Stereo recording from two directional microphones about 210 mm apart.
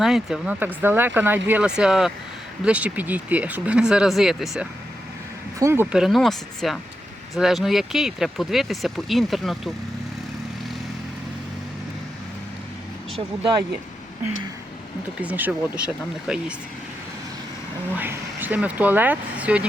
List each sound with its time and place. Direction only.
0.0 s speech: centre (ahead or behind)
5.5 s speech: 10° right (ahead or behind)
13.1 s speech: 25° right (ahead or behind)
15.2 s speech: 10° right (ahead or behind)
17.9 s speech: 10° right (ahead or behind)